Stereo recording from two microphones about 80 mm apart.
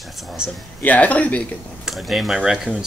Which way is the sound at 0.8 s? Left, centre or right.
Centre.